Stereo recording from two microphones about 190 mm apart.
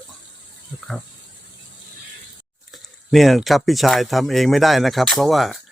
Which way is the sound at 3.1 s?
Centre (ahead or behind).